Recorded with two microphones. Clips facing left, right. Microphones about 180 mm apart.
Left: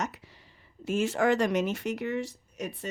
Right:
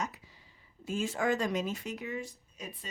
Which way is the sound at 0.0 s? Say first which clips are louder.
Left 4 dB; 70° left (ahead or behind).